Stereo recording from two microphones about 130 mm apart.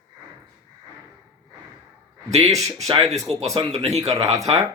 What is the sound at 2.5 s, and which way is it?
Speech, 25° right (ahead or behind).